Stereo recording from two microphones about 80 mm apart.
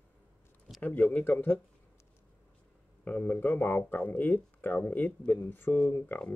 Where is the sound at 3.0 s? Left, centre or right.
Left.